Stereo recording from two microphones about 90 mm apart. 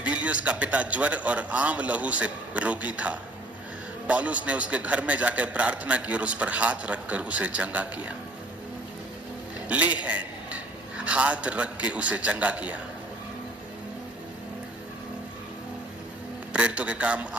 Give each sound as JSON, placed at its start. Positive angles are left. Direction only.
{"t": 0.0, "sound": "a man's voice", "side_deg": -15}
{"t": 9.6, "sound": "a man's voice", "side_deg": -15}
{"t": 16.5, "sound": "a man's voice", "side_deg": -10}